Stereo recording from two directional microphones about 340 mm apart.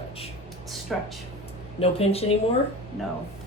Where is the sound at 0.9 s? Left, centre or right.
Centre.